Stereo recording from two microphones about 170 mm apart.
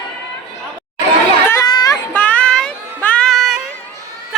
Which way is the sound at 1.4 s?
20° left (ahead or behind).